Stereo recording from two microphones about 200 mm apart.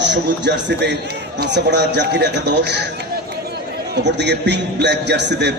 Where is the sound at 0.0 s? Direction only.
60° right (ahead or behind).